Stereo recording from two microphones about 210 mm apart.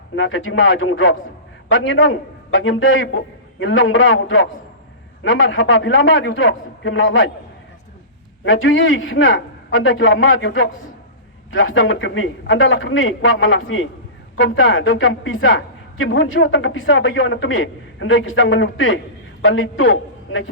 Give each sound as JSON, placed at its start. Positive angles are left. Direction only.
{"t": 0.2, "sound": "a woman's voice", "side_deg": 65}
{"t": 8.4, "sound": "a woman's voice", "side_deg": 70}